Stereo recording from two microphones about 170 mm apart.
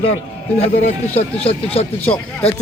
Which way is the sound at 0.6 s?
40° left (ahead or behind).